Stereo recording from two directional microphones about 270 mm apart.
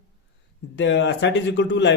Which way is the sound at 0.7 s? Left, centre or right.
Left.